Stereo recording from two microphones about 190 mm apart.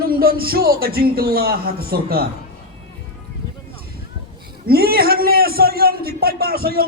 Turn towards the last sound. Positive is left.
turn(degrees=-50)  # may be behind; listen again after turning